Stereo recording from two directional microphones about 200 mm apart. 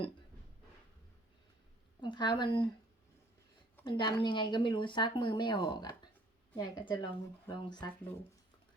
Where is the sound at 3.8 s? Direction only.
25° left (ahead or behind).